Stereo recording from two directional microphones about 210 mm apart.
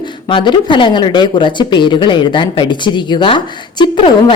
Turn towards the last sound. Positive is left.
turn(degrees=25)  # may be behind; listen again after turning